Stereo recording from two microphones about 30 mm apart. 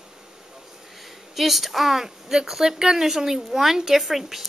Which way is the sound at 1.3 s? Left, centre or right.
Centre.